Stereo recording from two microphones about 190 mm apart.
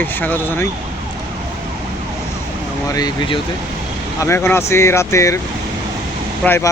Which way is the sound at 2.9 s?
20° left (ahead or behind).